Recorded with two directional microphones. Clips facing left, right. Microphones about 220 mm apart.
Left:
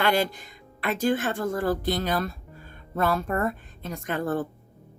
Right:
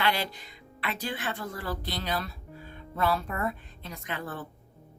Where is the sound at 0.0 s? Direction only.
50° left (ahead or behind).